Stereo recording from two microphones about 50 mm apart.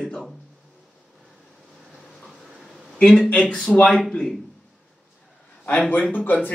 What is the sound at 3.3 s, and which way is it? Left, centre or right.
Speech, centre.